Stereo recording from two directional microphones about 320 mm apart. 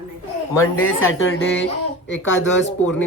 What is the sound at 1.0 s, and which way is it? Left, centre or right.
Speech, left.